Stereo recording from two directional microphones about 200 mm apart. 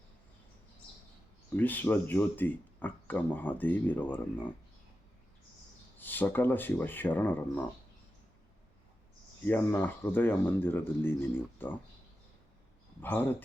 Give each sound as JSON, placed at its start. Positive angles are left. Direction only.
{"t": 1.5, "sound": "speech", "side_deg": 10}
{"t": 6.0, "sound": "speech", "side_deg": 10}
{"t": 9.4, "sound": "speech", "side_deg": 10}
{"t": 13.0, "sound": "speech", "side_deg": 10}